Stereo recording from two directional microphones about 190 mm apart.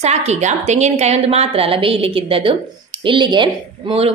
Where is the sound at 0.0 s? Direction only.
35° right (ahead or behind).